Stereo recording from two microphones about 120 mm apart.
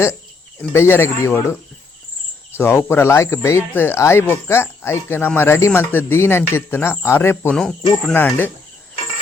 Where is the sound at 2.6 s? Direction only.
20° left (ahead or behind).